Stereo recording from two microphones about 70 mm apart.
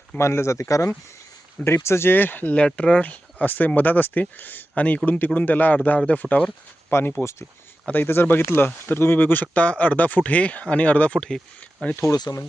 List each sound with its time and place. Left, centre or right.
0.2 s speech: left
6.9 s speech: left; by 11.9 s centre
12.1 s speech: left